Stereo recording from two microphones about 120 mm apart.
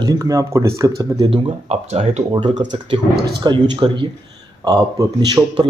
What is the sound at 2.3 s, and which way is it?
Speech, 45° right (ahead or behind).